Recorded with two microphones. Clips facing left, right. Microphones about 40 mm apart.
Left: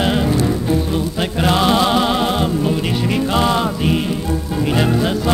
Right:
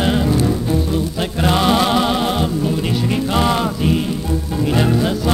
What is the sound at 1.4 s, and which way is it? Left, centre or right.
Music, centre.